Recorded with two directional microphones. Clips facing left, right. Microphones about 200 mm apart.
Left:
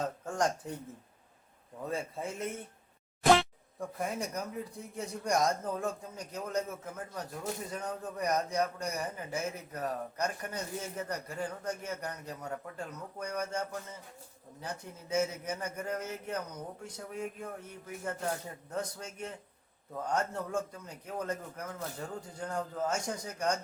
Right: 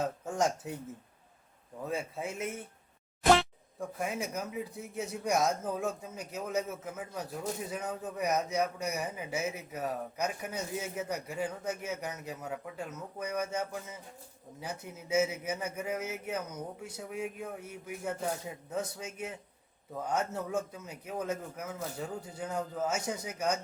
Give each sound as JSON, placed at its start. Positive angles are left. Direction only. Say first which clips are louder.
{"t": 0.0, "sound": "speech", "louder": "right 1 dB", "side_deg": -5}
{"t": 1.8, "sound": "a man's voice", "louder": "right 1 dB", "side_deg": 0}